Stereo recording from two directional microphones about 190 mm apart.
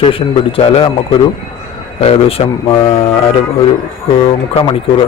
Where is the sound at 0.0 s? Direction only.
30° left (ahead or behind).